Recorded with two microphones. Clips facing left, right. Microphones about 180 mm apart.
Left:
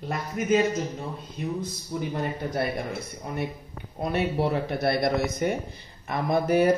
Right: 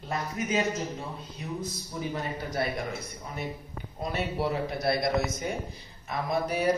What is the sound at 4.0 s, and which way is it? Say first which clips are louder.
Speech: left 5 dB; 60° left (ahead or behind).